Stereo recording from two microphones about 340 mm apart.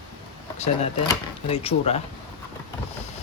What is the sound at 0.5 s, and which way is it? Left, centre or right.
Speech, centre.